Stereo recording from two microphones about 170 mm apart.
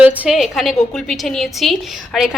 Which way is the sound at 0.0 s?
5° right (ahead or behind).